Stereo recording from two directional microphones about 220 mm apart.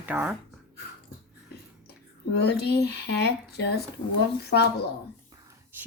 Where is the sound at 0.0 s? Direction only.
10° right (ahead or behind).